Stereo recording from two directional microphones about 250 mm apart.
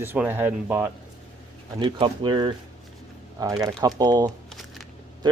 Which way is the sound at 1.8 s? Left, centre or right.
Centre.